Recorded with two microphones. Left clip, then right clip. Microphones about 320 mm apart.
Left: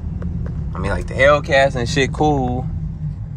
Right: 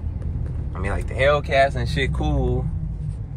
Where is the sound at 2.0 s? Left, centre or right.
Centre.